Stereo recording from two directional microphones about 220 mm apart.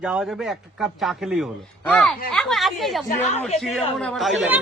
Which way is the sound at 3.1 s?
30° left (ahead or behind).